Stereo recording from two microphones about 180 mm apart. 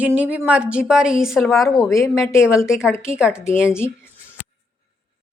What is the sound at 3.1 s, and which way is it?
Speech, 5° right (ahead or behind).